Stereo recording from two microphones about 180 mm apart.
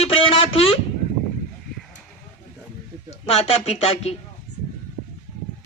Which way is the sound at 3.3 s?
35° left (ahead or behind).